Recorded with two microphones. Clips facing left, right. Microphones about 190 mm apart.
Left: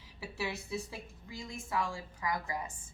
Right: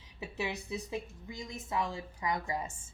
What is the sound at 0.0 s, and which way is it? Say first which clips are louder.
A woman's voice: right 1 dB; 20° right (ahead or behind).